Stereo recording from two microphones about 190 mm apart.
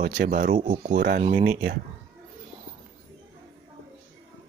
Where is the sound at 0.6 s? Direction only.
35° right (ahead or behind).